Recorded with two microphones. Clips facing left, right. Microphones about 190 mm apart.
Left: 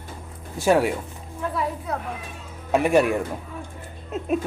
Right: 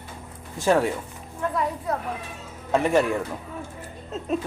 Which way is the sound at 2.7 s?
10° left (ahead or behind).